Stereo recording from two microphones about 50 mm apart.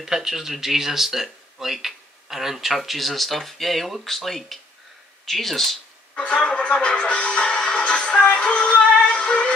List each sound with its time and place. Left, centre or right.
0.0 s speech: centre
6.1 s speech: left